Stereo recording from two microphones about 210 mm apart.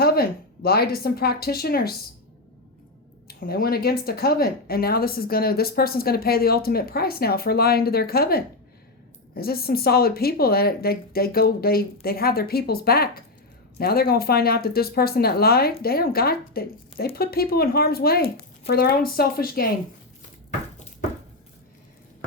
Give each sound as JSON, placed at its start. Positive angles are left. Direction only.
{"t": 0.0, "sound": "speech", "side_deg": 45}
{"t": 3.2, "sound": "speech", "side_deg": 45}